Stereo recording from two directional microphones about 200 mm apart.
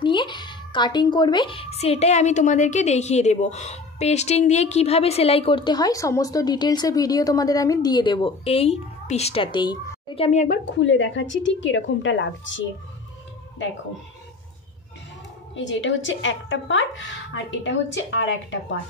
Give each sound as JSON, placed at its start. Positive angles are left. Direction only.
{"t": 0.0, "sound": "a woman's voice", "side_deg": 25}
{"t": 10.7, "sound": "speech", "side_deg": 65}
{"t": 15.5, "sound": "speech", "side_deg": 65}